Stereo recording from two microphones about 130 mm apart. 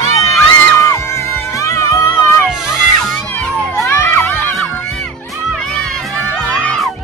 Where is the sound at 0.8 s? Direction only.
20° left (ahead or behind).